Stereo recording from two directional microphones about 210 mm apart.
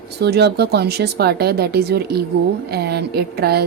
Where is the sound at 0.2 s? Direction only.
50° right (ahead or behind).